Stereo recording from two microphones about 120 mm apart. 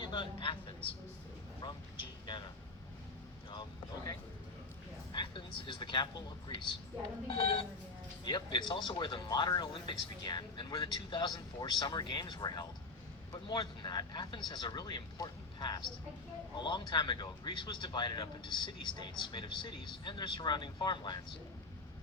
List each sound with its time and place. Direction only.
0.0 s speech: 40° left (ahead or behind)
3.5 s speech: 40° left (ahead or behind)